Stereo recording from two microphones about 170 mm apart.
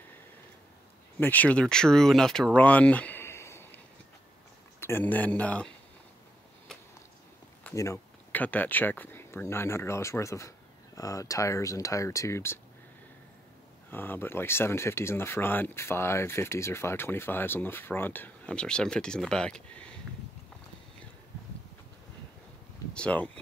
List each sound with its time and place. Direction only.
1.2 s speech: 10° left (ahead or behind)
7.6 s speech: 15° left (ahead or behind)
13.8 s speech: 10° left (ahead or behind)
22.9 s speech: 5° left (ahead or behind)